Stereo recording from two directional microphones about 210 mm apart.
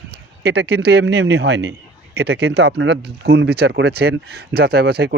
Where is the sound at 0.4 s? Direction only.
50° right (ahead or behind).